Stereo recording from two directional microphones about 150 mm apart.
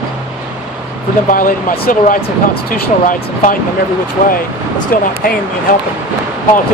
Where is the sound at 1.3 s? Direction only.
65° left (ahead or behind).